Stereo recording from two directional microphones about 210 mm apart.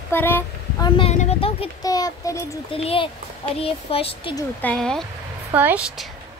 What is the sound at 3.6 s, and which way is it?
Speech, 25° left (ahead or behind).